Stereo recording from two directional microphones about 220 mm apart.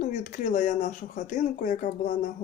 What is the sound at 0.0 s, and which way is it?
Speech, 35° left (ahead or behind).